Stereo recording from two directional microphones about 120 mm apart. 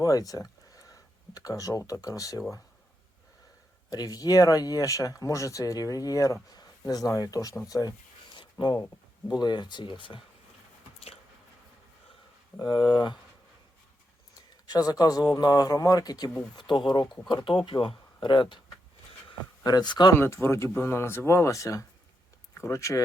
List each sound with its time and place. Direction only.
0.0 s speech: 30° left (ahead or behind)
3.8 s speech: 30° left (ahead or behind)
7.7 s a sound: 35° left (ahead or behind)
9.4 s speech: 35° left (ahead or behind)
12.5 s speech: 40° left (ahead or behind)
14.5 s speech: 30° left (ahead or behind)
19.6 s speech: 35° left (ahead or behind)
20.1 s speech: 20° left (ahead or behind)